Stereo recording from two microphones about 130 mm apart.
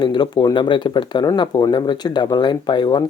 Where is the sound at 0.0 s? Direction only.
35° left (ahead or behind).